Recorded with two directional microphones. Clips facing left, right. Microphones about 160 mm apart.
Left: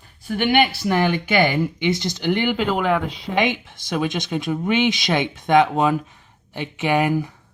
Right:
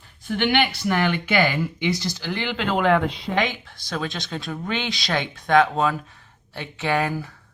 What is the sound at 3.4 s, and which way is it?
Speech, 20° left (ahead or behind).